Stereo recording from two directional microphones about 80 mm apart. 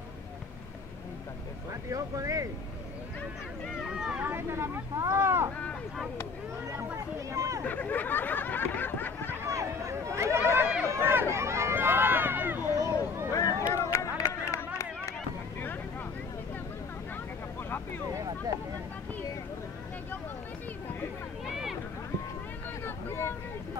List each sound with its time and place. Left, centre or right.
1.9 s speech: right
3.9 s speech: centre
4.2 s speech: right
7.3 s hubbub: right
7.6 s a sound: left
9.5 s a sound: right
11.3 s run: right
13.3 s a sound: left
17.6 s vehicle: left
22.8 s boat: left